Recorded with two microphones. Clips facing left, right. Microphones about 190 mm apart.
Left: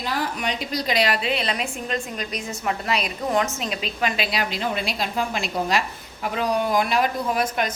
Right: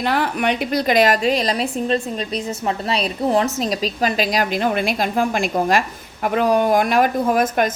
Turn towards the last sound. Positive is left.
turn(degrees=-50)  # may be behind; listen again after turning